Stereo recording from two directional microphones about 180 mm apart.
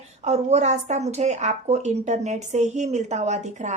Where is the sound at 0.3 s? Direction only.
40° right (ahead or behind).